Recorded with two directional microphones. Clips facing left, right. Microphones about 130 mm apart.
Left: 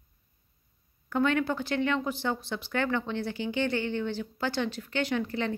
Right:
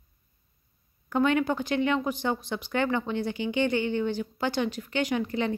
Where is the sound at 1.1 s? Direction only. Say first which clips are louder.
Right 2 dB; 15° right (ahead or behind).